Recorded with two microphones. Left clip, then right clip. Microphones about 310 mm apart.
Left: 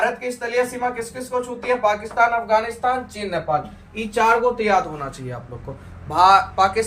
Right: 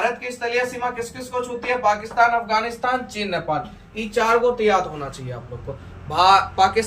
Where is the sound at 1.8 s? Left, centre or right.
Centre.